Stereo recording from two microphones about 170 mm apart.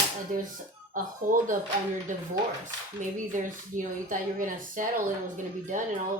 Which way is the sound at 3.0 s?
50° right (ahead or behind).